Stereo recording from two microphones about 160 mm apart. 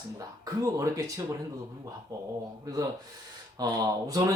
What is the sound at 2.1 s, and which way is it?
Speech, 20° right (ahead or behind).